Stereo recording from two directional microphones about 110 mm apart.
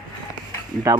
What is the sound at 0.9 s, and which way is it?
Speech, 30° right (ahead or behind).